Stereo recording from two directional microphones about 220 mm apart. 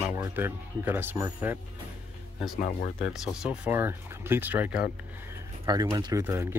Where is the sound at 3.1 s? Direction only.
5° right (ahead or behind).